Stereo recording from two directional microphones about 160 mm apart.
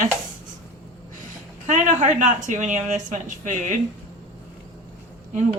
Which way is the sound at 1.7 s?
50° right (ahead or behind).